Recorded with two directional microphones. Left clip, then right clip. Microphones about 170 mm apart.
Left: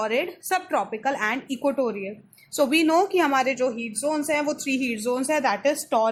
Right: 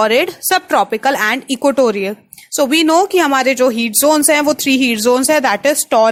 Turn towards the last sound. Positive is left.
turn(degrees=-40)  # may be behind; listen again after turning